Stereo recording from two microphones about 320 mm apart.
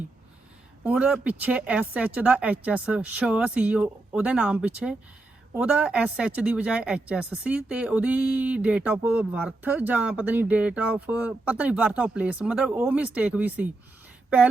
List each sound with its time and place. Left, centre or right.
0.9 s speech: centre